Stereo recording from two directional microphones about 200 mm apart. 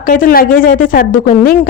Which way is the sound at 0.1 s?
45° left (ahead or behind).